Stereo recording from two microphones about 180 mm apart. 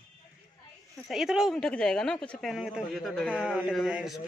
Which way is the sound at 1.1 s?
Centre (ahead or behind).